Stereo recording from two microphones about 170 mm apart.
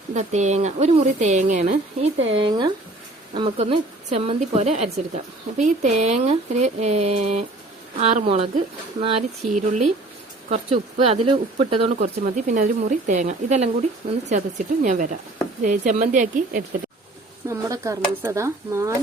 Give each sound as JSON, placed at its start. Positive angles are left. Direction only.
{"t": 0.1, "sound": "speech", "side_deg": -45}
{"t": 2.4, "sound": "a woman's voice", "side_deg": -25}
{"t": 9.6, "sound": "a woman's voice", "side_deg": -45}
{"t": 17.5, "sound": "speech", "side_deg": -15}